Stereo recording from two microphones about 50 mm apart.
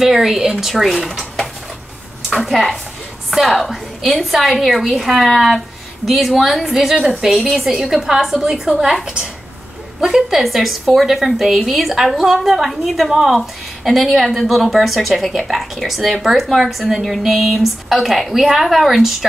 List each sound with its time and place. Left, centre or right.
0.0 s a woman's voice: centre
2.4 s a woman's voice: centre